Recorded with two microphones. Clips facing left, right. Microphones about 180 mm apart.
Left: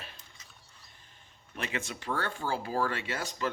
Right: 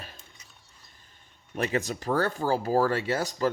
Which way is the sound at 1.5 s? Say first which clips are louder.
Right 8 dB; 40° right (ahead or behind).